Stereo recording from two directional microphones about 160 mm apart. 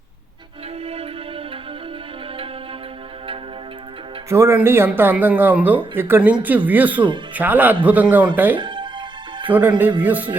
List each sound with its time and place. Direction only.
4.3 s speech: 15° right (ahead or behind)
8.5 s music: 30° right (ahead or behind)
9.5 s speech: 10° right (ahead or behind)